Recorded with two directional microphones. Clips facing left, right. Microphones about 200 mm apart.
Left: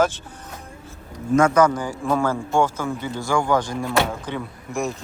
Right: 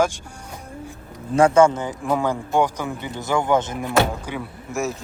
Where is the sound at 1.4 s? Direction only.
30° right (ahead or behind).